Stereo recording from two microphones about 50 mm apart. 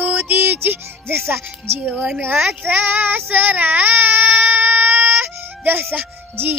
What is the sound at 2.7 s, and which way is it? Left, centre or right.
Child singing, right.